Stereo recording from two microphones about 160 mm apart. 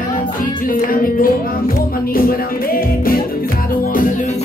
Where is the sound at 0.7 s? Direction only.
60° left (ahead or behind).